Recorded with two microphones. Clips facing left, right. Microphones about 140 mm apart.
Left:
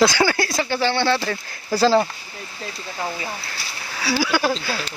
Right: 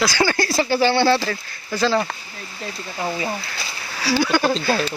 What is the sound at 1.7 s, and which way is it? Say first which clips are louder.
Speech: left 3 dB; 35° left (ahead or behind).